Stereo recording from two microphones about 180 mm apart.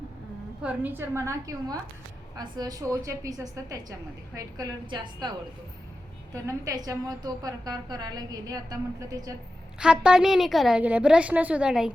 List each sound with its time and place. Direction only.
0.6 s a woman's voice: 10° right (ahead or behind); by 5.3 s 25° right (ahead or behind)
6.3 s a woman's voice: 20° right (ahead or behind)
9.8 s a woman's voice: 5° right (ahead or behind)